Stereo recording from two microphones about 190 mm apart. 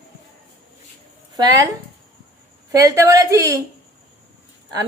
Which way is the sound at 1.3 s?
20° right (ahead or behind).